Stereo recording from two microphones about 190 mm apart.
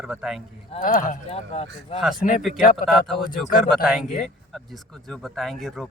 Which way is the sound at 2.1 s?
45° left (ahead or behind).